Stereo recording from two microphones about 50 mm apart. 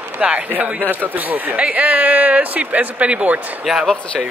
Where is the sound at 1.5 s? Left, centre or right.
Right.